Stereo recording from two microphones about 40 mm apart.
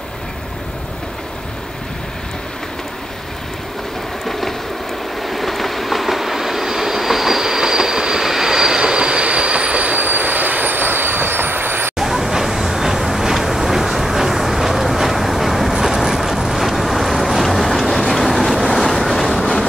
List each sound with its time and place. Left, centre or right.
4.3 s vehicle: centre
5.2 s train: centre; by 11.9 s right
12.0 s vehicle: centre
15.8 s boat: centre